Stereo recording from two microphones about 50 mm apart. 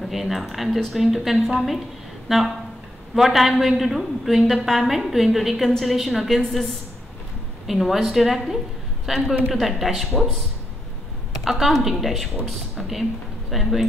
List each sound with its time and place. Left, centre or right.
0.0 s a woman's voice: centre
11.4 s a woman's voice: centre